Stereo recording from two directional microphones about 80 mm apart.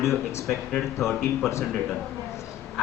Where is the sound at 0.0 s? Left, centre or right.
Left.